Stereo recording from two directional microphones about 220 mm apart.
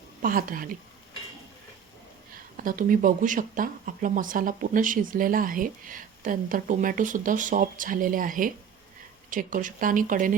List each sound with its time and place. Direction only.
0.2 s speech: 40° right (ahead or behind)
2.6 s speech: 40° right (ahead or behind)